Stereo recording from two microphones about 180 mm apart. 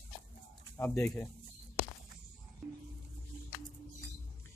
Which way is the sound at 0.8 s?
10° left (ahead or behind).